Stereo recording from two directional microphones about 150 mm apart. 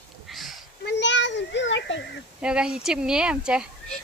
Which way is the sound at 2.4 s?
5° right (ahead or behind).